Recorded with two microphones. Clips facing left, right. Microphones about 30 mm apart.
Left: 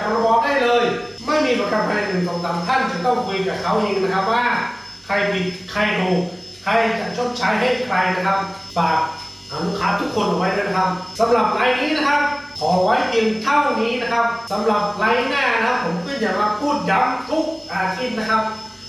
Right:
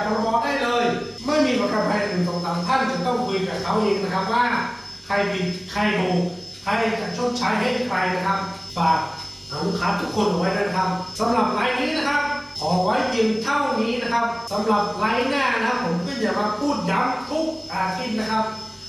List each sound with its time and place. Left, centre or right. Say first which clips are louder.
0.0 s a sound: left 4 dB; left
2.6 s speech: left 3 dB; centre
14.0 s speech: left 3 dB; centre